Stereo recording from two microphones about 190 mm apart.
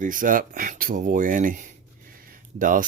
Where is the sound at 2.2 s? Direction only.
45° right (ahead or behind).